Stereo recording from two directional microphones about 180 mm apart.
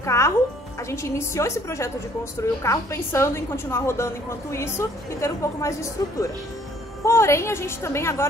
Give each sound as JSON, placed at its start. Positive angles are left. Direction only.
{"t": 0.0, "sound": "music", "side_deg": 15}
{"t": 0.8, "sound": "a woman's voice", "side_deg": 15}